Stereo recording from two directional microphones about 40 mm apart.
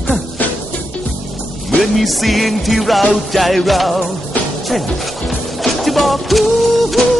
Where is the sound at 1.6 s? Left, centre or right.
Centre.